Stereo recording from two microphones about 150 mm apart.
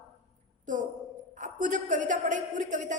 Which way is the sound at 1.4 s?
55° right (ahead or behind).